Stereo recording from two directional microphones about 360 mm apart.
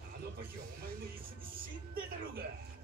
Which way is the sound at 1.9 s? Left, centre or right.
Right.